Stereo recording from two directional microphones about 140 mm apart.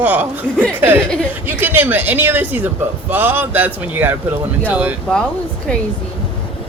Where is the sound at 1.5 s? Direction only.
15° right (ahead or behind).